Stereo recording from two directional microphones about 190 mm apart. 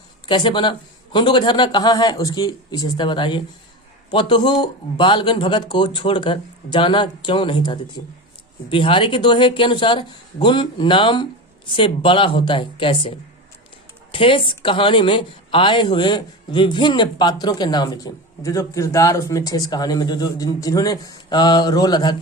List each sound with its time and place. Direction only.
0.3 s speech: 25° left (ahead or behind)